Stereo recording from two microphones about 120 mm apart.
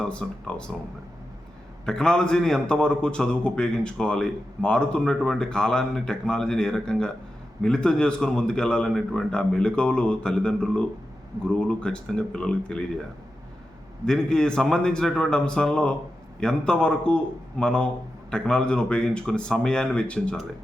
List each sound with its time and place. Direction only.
0.0 s a man's voice: 10° left (ahead or behind)
1.8 s a man's voice: 5° left (ahead or behind)
14.1 s a man's voice: 5° left (ahead or behind)